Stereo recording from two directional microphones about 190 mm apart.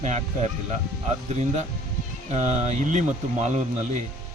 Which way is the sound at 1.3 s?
35° right (ahead or behind).